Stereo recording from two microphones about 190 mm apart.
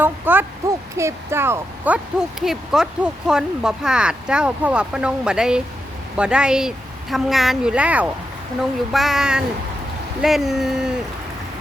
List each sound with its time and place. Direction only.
0.0 s speech: 10° right (ahead or behind)